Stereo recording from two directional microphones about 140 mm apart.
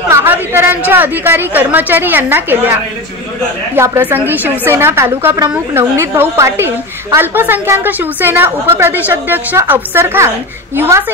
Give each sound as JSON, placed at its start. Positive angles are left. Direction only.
{"t": 0.1, "sound": "a woman's voice", "side_deg": -15}